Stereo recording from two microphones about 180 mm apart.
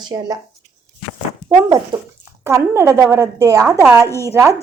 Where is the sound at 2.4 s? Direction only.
15° right (ahead or behind).